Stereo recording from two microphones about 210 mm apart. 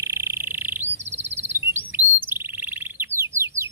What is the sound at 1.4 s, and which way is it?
Chirp, 10° right (ahead or behind).